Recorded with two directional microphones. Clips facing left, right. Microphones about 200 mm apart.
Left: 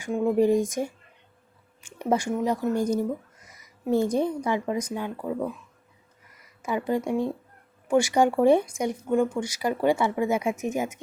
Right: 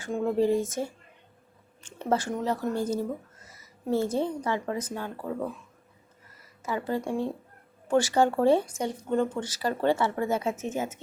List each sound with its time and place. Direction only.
0.0 s a woman's voice: 15° left (ahead or behind)
6.6 s speech: 15° left (ahead or behind)